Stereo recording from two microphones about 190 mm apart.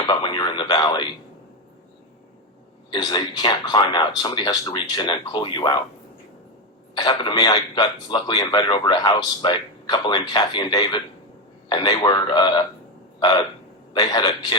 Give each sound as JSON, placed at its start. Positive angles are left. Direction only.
{"t": 0.0, "sound": "a man's voice", "side_deg": 25}
{"t": 2.9, "sound": "a man's voice", "side_deg": 25}
{"t": 6.9, "sound": "a man's voice", "side_deg": 25}